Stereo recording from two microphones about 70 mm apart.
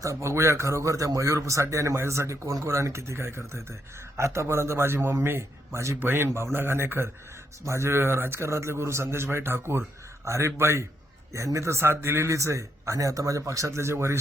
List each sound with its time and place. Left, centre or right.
0.0 s a man's voice: right
6.0 s a man's voice: right